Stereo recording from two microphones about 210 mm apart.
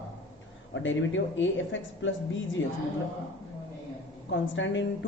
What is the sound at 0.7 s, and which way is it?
A woman's voice, 65° left (ahead or behind).